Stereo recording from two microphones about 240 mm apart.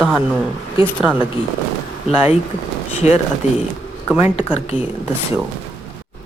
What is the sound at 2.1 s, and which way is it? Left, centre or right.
Speech, left.